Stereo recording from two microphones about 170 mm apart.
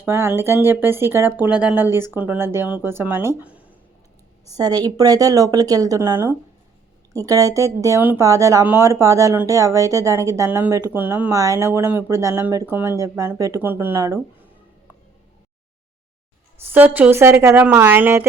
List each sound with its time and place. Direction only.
0.0 s speech: 10° right (ahead or behind)
3.4 s a sound: 10° right (ahead or behind)
4.4 s speech: 20° right (ahead or behind)
16.7 s speech: 10° right (ahead or behind)